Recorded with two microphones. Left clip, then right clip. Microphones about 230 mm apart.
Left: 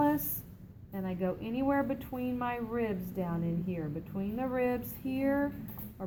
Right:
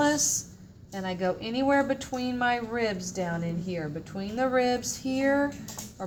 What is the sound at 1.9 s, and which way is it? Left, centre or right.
Speech, centre.